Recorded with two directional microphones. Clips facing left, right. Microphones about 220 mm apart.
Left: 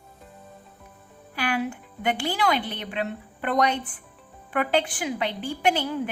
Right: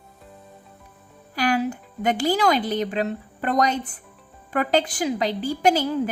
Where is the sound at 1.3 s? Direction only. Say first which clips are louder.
Right 5 dB; 40° right (ahead or behind).